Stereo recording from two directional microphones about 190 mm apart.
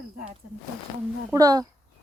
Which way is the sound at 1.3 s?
20° right (ahead or behind).